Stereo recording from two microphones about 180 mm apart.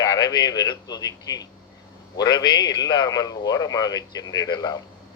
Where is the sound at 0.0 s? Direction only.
20° left (ahead or behind).